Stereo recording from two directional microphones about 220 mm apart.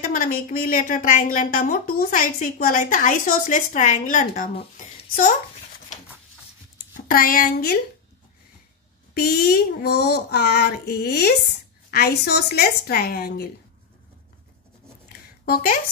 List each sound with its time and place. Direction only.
0.0 s a woman's voice: 35° left (ahead or behind)
7.1 s a woman's voice: 40° left (ahead or behind)
9.1 s speech: 45° left (ahead or behind)
15.4 s speech: 40° left (ahead or behind)